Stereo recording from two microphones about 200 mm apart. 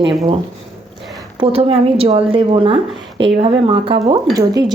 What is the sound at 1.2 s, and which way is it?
A woman's voice, 25° right (ahead or behind).